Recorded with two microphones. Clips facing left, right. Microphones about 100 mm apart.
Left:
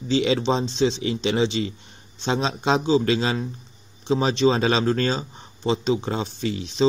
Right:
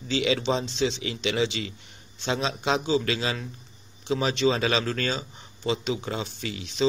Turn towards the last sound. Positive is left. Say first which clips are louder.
# left 6 dB
turn(degrees=35)  # may be behind; listen again after turning